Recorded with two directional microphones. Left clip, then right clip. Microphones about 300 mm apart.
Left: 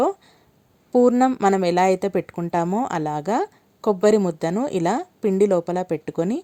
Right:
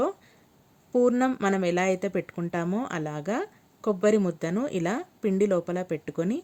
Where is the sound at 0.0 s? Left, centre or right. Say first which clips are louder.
Left 7 dB; centre.